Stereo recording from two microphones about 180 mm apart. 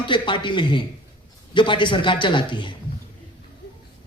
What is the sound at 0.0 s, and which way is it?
A man's voice, 25° left (ahead or behind).